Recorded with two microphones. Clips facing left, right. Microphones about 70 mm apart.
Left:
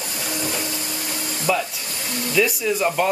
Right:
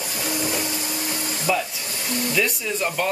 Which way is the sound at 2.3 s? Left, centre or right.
Centre.